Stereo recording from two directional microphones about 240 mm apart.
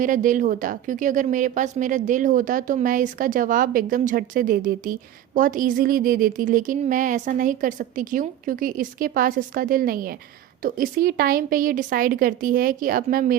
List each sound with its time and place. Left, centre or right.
0.0 s a woman's voice: right